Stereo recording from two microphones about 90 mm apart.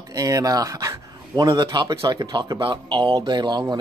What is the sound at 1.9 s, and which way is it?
Speech, 40° right (ahead or behind).